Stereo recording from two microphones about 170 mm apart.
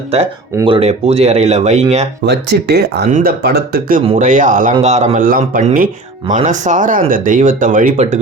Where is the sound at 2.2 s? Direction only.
75° right (ahead or behind).